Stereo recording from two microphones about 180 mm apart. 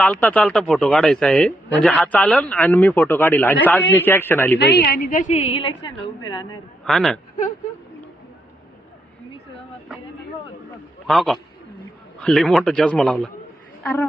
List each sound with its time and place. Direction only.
0.0 s a man's voice: 5° left (ahead or behind)
4.5 s a woman's voice: 65° left (ahead or behind); by 6.6 s 25° left (ahead or behind)
6.8 s a man's voice: centre (ahead or behind)
11.0 s a man's voice: centre (ahead or behind)